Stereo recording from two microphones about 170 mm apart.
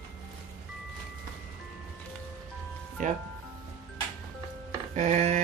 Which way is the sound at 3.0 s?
50° right (ahead or behind).